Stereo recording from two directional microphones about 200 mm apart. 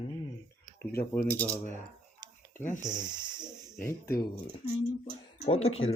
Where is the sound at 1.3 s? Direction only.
10° left (ahead or behind).